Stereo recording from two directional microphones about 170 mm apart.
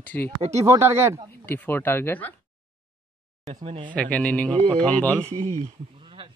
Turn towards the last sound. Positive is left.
turn(degrees=-35)  # may be behind; listen again after turning